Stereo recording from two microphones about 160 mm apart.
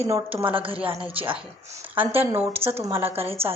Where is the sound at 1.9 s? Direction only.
10° right (ahead or behind).